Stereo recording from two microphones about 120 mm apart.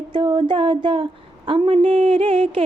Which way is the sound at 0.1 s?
45° right (ahead or behind).